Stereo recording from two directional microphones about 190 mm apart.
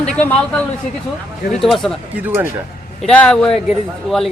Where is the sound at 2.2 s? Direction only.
10° right (ahead or behind).